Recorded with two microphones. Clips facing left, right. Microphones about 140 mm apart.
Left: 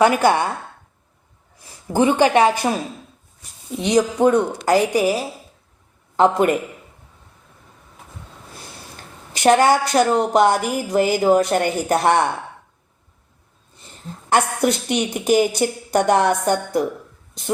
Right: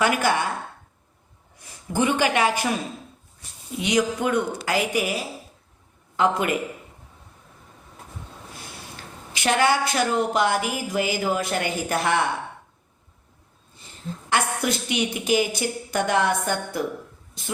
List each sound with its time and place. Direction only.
1.9 s a woman's voice: 40° left (ahead or behind)
3.8 s a woman's voice: 35° left (ahead or behind)
9.3 s a woman's voice: 40° left (ahead or behind)
14.3 s a woman's voice: 45° left (ahead or behind)